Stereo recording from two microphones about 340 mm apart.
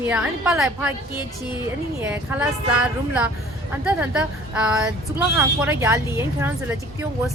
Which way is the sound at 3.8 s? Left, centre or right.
Centre.